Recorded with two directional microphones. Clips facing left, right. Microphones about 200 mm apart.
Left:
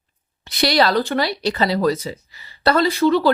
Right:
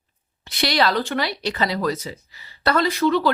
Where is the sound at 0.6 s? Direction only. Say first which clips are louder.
Left 4 dB; 35° left (ahead or behind).